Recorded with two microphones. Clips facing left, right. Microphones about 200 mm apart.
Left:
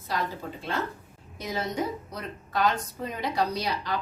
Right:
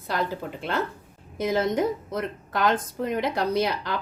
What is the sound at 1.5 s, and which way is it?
A woman's voice, 50° right (ahead or behind).